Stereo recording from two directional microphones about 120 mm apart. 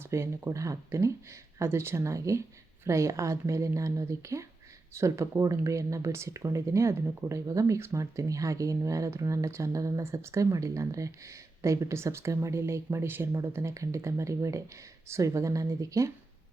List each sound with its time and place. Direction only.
0.1 s speech: 20° right (ahead or behind)